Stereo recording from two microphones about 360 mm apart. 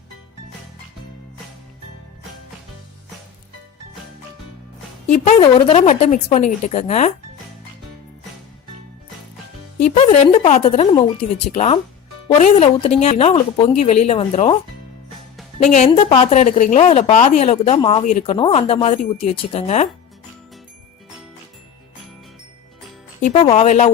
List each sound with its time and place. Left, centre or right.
5.0 s a woman's voice: left
9.9 s a woman's voice: centre
15.6 s a woman's voice: centre
23.2 s a woman's voice: centre